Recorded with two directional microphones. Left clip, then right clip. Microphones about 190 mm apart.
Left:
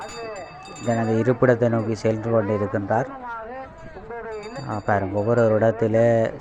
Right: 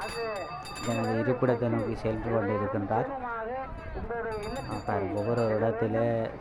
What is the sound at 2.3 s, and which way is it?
Speech, 45° left (ahead or behind).